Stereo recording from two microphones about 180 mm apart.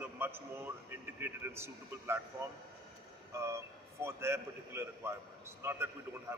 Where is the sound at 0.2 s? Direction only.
10° right (ahead or behind).